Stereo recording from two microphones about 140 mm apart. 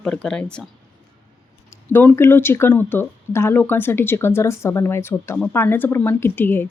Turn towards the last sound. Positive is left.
turn(degrees=15)  # may be behind; listen again after turning